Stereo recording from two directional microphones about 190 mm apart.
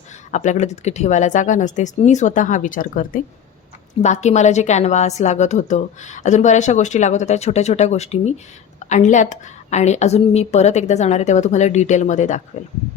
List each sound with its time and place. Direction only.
0.3 s a woman's voice: 40° left (ahead or behind)